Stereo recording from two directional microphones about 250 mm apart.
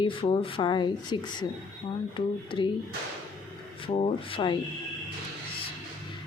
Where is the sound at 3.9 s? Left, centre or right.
Left.